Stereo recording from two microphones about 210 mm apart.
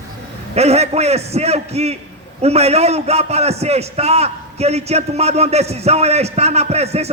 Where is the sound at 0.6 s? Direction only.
30° right (ahead or behind).